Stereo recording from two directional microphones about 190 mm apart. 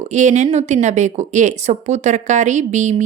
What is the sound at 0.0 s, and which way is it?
Speech, 40° right (ahead or behind).